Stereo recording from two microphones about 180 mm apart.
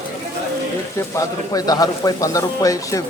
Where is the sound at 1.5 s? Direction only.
20° left (ahead or behind).